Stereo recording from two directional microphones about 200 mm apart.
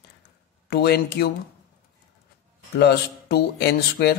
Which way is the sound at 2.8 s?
55° left (ahead or behind).